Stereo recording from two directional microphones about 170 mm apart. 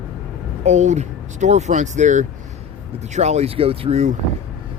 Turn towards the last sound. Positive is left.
turn(degrees=-40)  # may be behind; listen again after turning